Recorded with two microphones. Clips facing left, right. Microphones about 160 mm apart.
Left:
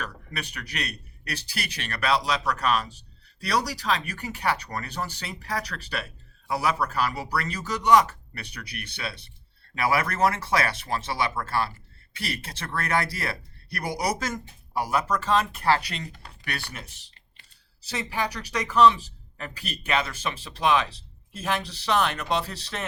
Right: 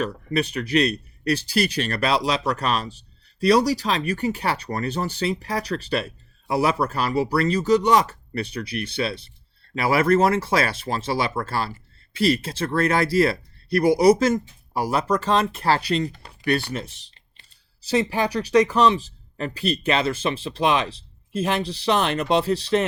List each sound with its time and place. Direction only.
0.0 s speech: 25° right (ahead or behind)
17.9 s speech: 25° right (ahead or behind)